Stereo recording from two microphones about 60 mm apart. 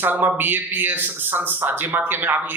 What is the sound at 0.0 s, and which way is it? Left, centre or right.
A man's voice, right.